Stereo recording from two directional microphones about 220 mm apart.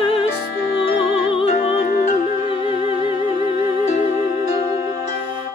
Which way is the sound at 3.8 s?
30° left (ahead or behind).